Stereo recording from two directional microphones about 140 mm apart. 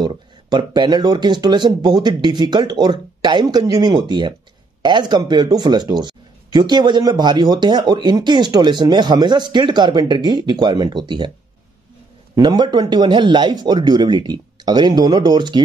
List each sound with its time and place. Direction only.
0.0 s speech: 30° right (ahead or behind)
12.4 s speech: 35° right (ahead or behind)